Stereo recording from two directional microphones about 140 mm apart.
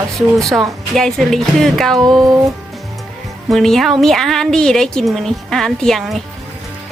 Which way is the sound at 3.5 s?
Centre (ahead or behind).